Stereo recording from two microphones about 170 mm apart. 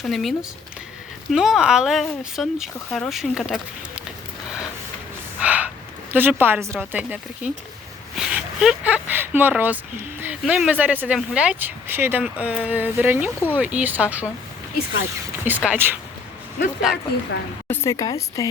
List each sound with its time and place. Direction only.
0.0 s speech: centre (ahead or behind)
5.4 s a sound: 10° right (ahead or behind)
6.7 s speech: 10° right (ahead or behind)
15.4 s speech: 10° right (ahead or behind)
17.7 s speech: 20° left (ahead or behind)